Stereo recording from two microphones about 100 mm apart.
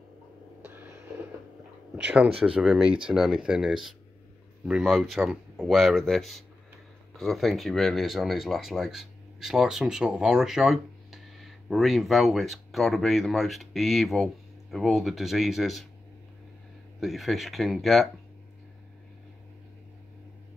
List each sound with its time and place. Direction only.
0.6 s a sound: 20° right (ahead or behind)
2.0 s speech: 10° right (ahead or behind)
17.0 s speech: centre (ahead or behind)